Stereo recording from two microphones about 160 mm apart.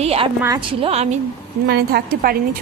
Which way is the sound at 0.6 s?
35° right (ahead or behind).